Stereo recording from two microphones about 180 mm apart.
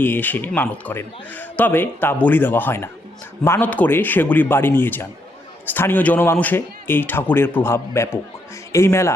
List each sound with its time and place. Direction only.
0.0 s a man's voice: 10° left (ahead or behind)